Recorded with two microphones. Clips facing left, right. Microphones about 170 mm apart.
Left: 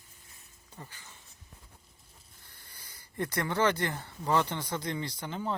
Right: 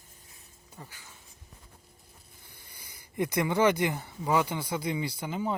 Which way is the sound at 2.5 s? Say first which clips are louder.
Right 2 dB; 15° right (ahead or behind).